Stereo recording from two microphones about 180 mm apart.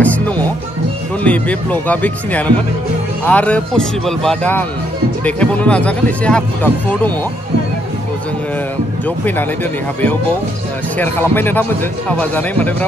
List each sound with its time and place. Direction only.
0.0 s music: 10° left (ahead or behind)
1.2 s speech: 5° left (ahead or behind)
9.0 s speech: 10° left (ahead or behind)
11.0 s speech: 10° left (ahead or behind)